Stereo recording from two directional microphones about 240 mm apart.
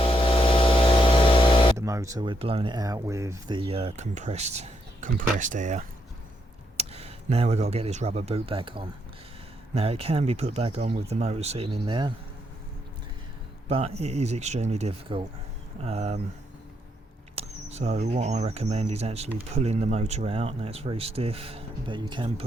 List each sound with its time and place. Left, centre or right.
0.0 s a sound: left
1.7 s speech: centre
13.7 s speech: right
17.3 s speech: right